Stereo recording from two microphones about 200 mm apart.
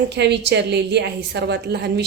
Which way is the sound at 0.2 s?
60° right (ahead or behind).